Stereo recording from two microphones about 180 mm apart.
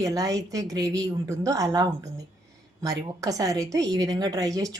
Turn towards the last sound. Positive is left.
turn(degrees=-20)  # may be behind; listen again after turning